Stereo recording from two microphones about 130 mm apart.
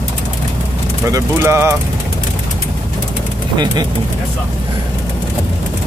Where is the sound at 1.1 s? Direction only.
20° right (ahead or behind).